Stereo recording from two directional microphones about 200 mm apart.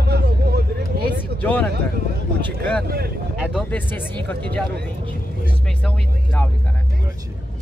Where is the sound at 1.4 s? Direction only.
5° left (ahead or behind).